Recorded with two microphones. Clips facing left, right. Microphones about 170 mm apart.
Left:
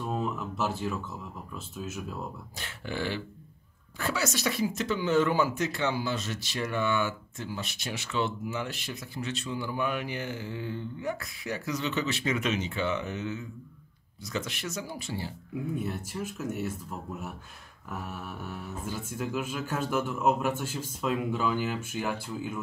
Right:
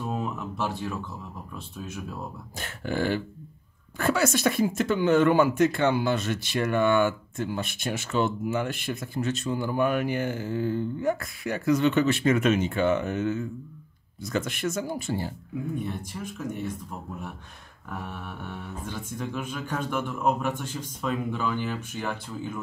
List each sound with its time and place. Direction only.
0.0 s a sound: centre (ahead or behind)
2.6 s speech: 50° right (ahead or behind)
15.8 s speech: 5° left (ahead or behind)
18.0 s speech: 5° left (ahead or behind)